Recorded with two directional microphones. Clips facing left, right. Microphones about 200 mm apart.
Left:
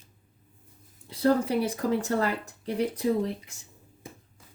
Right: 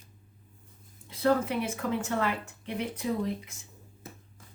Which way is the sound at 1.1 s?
35° left (ahead or behind).